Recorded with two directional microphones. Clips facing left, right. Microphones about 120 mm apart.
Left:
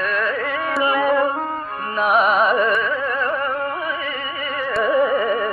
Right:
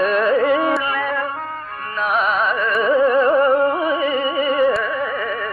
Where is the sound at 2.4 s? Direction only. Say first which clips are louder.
Left 3 dB; 10° left (ahead or behind).